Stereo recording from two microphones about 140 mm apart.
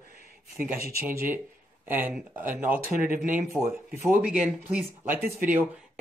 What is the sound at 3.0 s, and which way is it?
Speech, 80° right.